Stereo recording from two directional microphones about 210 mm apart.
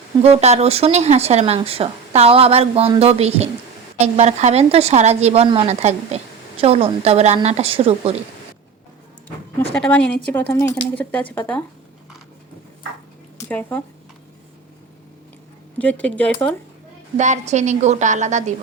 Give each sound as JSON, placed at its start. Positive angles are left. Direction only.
{"t": 0.2, "sound": "speech", "side_deg": -30}
{"t": 9.7, "sound": "a woman's voice", "side_deg": 5}
{"t": 13.5, "sound": "speech", "side_deg": 10}
{"t": 15.8, "sound": "speech", "side_deg": 5}
{"t": 17.2, "sound": "speech", "side_deg": -35}